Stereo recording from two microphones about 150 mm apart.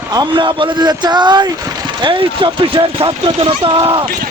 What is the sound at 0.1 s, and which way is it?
A man's voice, 25° right (ahead or behind).